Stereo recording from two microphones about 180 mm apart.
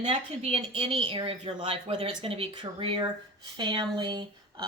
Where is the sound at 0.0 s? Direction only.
30° right (ahead or behind).